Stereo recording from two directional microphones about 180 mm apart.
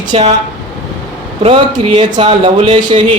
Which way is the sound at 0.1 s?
35° right (ahead or behind).